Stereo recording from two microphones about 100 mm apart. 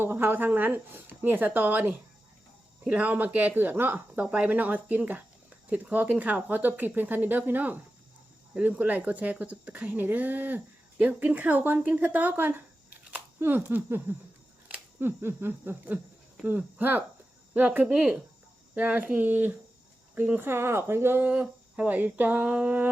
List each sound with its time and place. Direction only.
0.0 s speech: 25° right (ahead or behind)